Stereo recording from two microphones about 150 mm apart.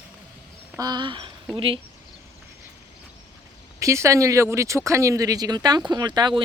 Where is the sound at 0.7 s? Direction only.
25° right (ahead or behind).